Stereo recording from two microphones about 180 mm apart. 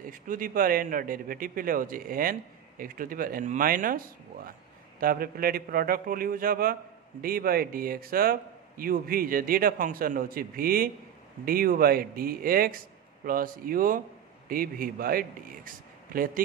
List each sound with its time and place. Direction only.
0.1 s a man's voice: 50° right (ahead or behind)
5.0 s a man's voice: 55° right (ahead or behind)